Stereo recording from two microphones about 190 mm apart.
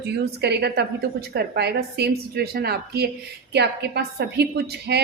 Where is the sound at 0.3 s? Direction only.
60° right (ahead or behind).